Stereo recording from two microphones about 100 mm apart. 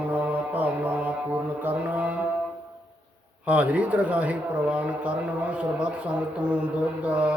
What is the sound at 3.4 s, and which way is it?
Speech, 15° right (ahead or behind).